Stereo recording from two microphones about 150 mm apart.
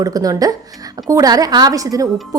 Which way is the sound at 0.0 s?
25° right (ahead or behind).